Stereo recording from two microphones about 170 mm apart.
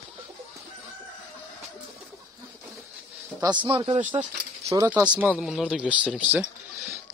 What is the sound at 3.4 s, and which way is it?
Speech, 30° right (ahead or behind).